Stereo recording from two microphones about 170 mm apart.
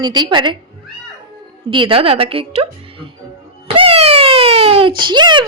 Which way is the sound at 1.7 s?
30° right (ahead or behind).